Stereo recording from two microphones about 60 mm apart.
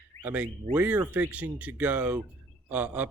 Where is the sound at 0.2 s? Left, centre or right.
Right.